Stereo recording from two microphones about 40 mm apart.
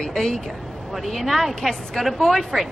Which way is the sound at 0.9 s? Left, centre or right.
Centre.